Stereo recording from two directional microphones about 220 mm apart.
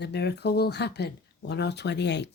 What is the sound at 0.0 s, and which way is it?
Speech, 50° left (ahead or behind).